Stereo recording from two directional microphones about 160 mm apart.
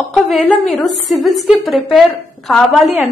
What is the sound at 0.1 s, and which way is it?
A woman's voice, centre (ahead or behind).